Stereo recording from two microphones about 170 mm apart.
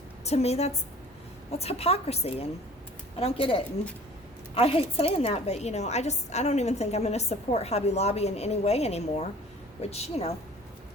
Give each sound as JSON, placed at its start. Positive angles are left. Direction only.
{"t": 0.3, "sound": "a woman's voice", "side_deg": 40}